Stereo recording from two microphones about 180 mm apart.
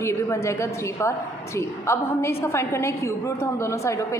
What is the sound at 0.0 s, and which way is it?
A woman's voice, 15° left (ahead or behind).